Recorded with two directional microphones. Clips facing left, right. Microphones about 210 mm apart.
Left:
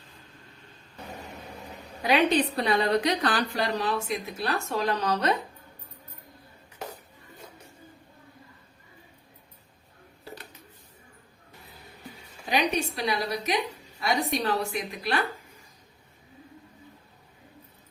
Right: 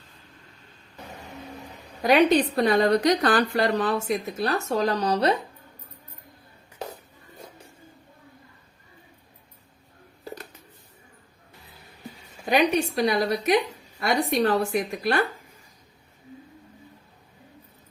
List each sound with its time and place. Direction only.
2.0 s a woman's voice: 45° right (ahead or behind)
12.5 s a woman's voice: 55° right (ahead or behind)